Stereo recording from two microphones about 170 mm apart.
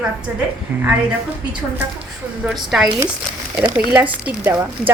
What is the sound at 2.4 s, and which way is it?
Speech, centre (ahead or behind).